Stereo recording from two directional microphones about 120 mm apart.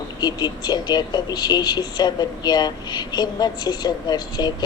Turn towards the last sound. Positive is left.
turn(degrees=35)  # may be behind; listen again after turning